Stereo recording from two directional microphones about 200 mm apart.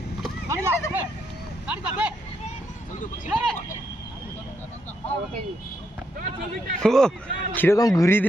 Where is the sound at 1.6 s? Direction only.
5° right (ahead or behind).